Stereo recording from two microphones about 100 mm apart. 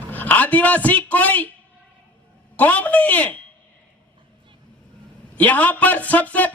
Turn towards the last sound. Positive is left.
turn(degrees=15)  # may be behind; listen again after turning